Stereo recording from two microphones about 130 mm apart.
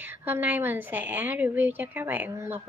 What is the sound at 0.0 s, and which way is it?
A woman's voice, 15° right (ahead or behind).